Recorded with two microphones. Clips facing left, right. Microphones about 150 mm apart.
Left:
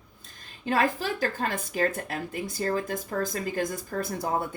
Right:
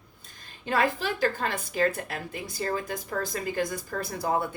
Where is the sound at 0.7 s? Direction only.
45° left (ahead or behind).